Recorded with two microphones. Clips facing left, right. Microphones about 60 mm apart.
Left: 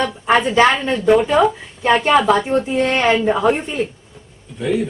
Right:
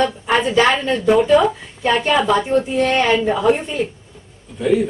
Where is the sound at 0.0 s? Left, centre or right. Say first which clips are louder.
Left 1 dB; centre.